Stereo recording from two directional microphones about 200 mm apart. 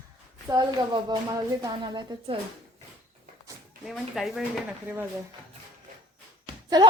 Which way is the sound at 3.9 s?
Centre (ahead or behind).